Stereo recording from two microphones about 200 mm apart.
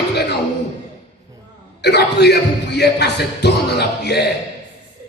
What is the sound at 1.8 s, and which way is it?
Speech, 55° left (ahead or behind).